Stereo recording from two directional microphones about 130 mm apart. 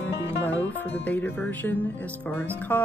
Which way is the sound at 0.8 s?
15° left (ahead or behind).